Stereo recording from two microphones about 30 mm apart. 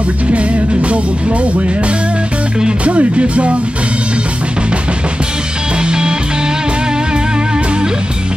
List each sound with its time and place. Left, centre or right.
0.3 s music: right
2.8 s speech: right
5.8 s music: right